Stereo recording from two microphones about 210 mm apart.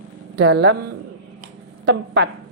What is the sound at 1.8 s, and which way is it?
Speech, 55° right (ahead or behind).